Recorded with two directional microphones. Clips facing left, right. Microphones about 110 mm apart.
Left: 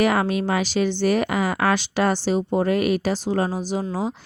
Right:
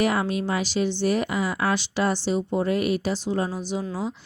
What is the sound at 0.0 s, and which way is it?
Speech, 75° left (ahead or behind).